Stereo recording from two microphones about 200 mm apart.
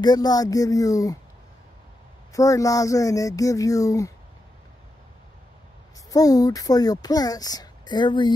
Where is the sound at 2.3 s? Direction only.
15° left (ahead or behind).